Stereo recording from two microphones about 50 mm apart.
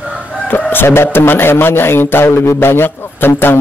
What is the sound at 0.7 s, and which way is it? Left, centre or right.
A man's voice, left.